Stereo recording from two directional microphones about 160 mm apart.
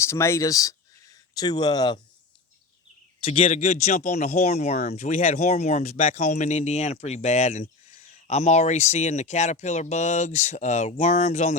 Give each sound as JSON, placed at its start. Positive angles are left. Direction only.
{"t": 0.0, "sound": "speech", "side_deg": 15}
{"t": 3.2, "sound": "speech", "side_deg": 35}